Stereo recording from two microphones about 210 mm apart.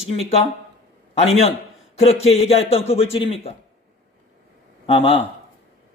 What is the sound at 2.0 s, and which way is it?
A man's voice, 30° left (ahead or behind).